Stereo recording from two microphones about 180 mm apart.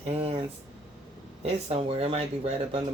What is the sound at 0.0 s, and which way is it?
Air conditioning, 30° right (ahead or behind).